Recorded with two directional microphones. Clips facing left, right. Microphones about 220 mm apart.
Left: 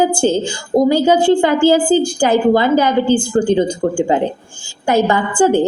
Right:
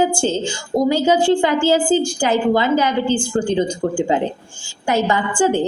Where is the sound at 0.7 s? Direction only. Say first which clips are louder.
Left 4 dB; 55° left (ahead or behind).